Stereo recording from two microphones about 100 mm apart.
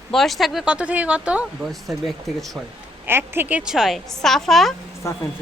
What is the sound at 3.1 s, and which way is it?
Speech, 20° right (ahead or behind).